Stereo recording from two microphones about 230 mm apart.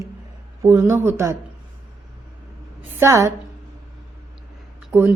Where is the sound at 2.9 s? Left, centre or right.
Centre.